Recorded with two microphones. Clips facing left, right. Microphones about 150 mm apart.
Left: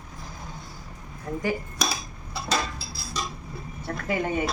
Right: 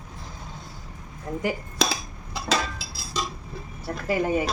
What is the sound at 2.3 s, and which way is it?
Dishes, 90° right.